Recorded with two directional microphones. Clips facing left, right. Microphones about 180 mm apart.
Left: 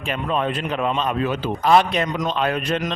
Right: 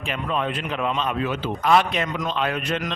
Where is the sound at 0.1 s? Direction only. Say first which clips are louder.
Left 3 dB; 40° left (ahead or behind).